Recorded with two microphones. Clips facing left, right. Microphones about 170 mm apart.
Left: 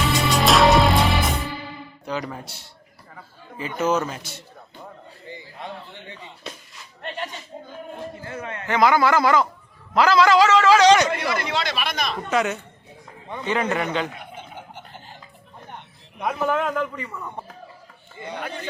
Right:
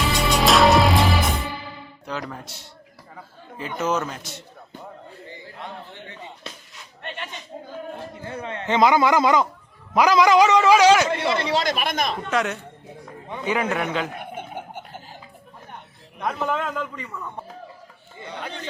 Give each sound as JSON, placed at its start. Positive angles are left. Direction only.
{"t": 0.0, "sound": "music", "side_deg": 0}
{"t": 2.0, "sound": "a man's voice", "side_deg": 0}
{"t": 3.8, "sound": "a man's voice", "side_deg": 5}
{"t": 8.4, "sound": "a man's voice", "side_deg": -25}
{"t": 11.1, "sound": "a man's voice", "side_deg": -25}
{"t": 11.5, "sound": "speech", "side_deg": -45}
{"t": 12.3, "sound": "a man's voice", "side_deg": 0}
{"t": 13.3, "sound": "a man's voice", "side_deg": -10}
{"t": 14.2, "sound": "a sound", "side_deg": -55}
{"t": 16.2, "sound": "a man's voice", "side_deg": 5}